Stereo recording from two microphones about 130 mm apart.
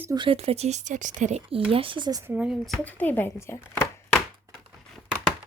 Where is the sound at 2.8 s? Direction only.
15° left (ahead or behind).